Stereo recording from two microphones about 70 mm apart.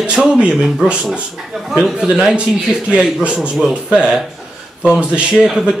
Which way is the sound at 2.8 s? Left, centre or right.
Centre.